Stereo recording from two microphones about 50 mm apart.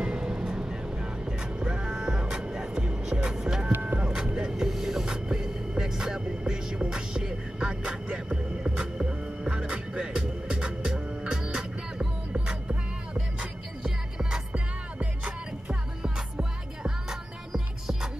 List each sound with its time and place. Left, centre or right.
0.0 s music: centre
14.5 s music: right